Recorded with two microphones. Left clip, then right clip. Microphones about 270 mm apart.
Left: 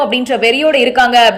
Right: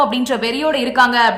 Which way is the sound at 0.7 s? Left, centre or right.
Right.